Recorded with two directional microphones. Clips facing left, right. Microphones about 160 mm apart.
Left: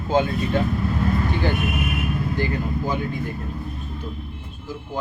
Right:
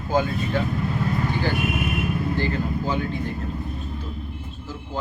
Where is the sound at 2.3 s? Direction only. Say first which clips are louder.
Even; 15° left (ahead or behind).